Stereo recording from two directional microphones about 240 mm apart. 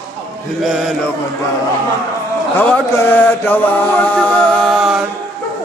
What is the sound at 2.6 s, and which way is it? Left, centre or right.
Mantra, centre.